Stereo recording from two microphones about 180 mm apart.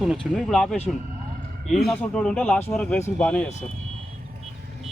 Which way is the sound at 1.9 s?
5° left (ahead or behind).